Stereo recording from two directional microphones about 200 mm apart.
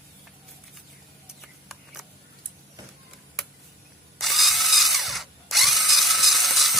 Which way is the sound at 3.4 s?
Centre (ahead or behind).